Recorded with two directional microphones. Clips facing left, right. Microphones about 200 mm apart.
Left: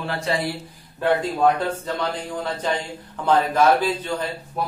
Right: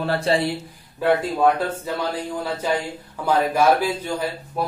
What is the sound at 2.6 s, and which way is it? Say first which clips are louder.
Speech: right 2 dB; 10° right (ahead or behind).